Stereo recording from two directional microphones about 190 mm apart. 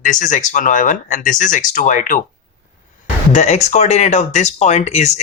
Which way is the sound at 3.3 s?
35° left (ahead or behind).